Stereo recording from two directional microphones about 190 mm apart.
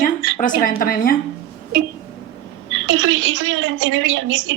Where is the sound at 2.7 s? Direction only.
85° right.